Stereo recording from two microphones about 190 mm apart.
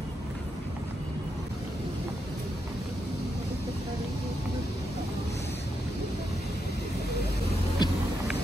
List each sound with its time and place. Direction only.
7.8 s vehicle: 20° left (ahead or behind)